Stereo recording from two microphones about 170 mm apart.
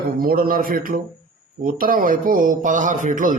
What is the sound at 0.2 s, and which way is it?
A man's voice, 60° right (ahead or behind).